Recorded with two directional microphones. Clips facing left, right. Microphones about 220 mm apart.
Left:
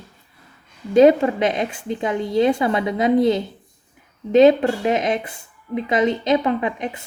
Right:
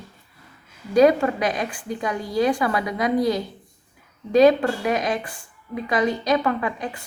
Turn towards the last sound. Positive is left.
turn(degrees=20)  # may be behind; listen again after turning